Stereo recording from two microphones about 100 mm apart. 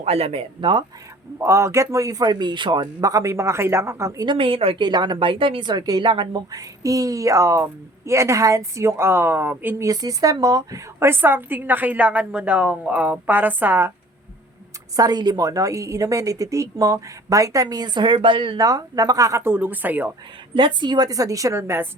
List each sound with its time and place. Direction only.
0.0 s speech: 85° right
1.4 s a woman's voice: 30° right (ahead or behind); by 2.8 s 50° right (ahead or behind)
2.8 s speech: 35° right (ahead or behind)
4.3 s a woman's voice: 60° right (ahead or behind)
4.8 s a woman's voice: 45° right (ahead or behind); by 9.7 s 20° right (ahead or behind)
9.7 s a woman's voice: 35° right (ahead or behind)
11.0 s a woman's voice: 20° right (ahead or behind)
14.9 s a woman's voice: 40° right (ahead or behind)
18.5 s speech: 35° right (ahead or behind); by 20.1 s 20° right (ahead or behind)
20.6 s a woman's voice: 50° right (ahead or behind); by 21.8 s 25° right (ahead or behind)